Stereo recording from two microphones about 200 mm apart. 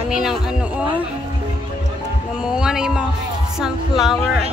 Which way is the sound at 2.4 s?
5° right (ahead or behind).